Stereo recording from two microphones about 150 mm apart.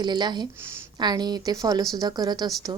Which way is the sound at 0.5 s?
15° right (ahead or behind).